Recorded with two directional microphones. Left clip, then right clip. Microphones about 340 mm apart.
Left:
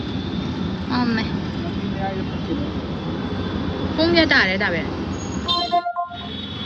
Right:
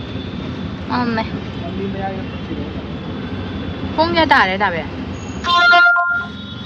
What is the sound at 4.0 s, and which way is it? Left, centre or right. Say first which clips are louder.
Speech: right 4 dB; centre.